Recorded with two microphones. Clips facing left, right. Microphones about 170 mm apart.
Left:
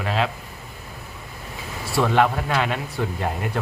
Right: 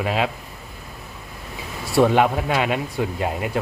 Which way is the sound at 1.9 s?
20° right (ahead or behind).